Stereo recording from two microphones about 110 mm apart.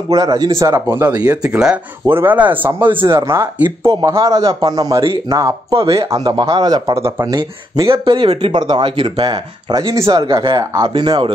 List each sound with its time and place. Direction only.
0.1 s speech: 35° right (ahead or behind)
1.2 s speech: 10° right (ahead or behind)
2.0 s speech: 20° right (ahead or behind); by 7.0 s 35° right (ahead or behind)
7.0 s speech: 25° right (ahead or behind)
7.2 s speech: 40° right (ahead or behind)
9.1 s speech: 40° right (ahead or behind)